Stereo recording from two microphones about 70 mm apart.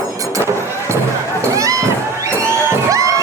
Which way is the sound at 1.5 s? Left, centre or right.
Right.